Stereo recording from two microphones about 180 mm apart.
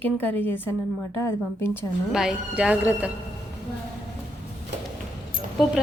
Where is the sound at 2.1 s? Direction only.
5° right (ahead or behind).